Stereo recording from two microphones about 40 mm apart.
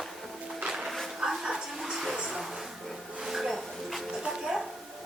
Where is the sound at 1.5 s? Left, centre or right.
Centre.